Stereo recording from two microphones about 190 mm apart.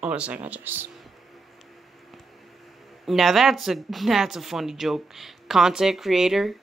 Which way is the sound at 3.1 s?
Centre (ahead or behind).